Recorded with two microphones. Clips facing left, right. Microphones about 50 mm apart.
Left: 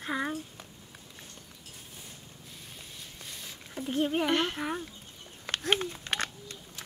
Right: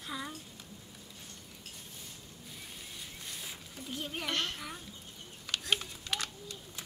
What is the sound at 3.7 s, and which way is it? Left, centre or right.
Speech, left.